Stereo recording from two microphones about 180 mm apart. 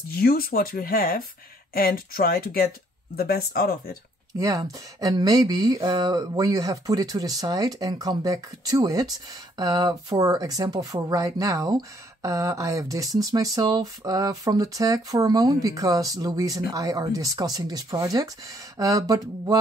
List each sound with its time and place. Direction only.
0.1 s speech: 55° left (ahead or behind)
4.4 s speech: 20° right (ahead or behind)